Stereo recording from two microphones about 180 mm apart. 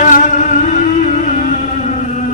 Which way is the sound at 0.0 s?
45° left (ahead or behind).